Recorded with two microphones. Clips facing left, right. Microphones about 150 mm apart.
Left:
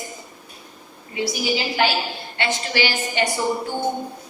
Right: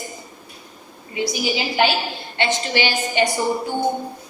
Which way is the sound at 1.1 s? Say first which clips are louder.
Right 1 dB; 20° right (ahead or behind).